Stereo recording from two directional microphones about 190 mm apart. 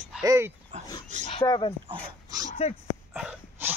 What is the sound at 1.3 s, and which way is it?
Speech, 25° left (ahead or behind).